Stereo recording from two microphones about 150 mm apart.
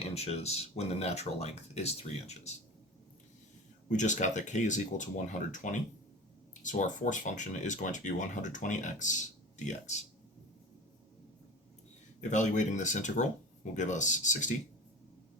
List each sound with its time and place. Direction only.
0.0 s speech: 45° left (ahead or behind)
3.8 s speech: 55° left (ahead or behind)
12.3 s speech: 55° left (ahead or behind)